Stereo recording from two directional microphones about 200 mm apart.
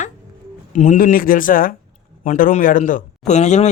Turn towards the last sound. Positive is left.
turn(degrees=35)  # may be behind; listen again after turning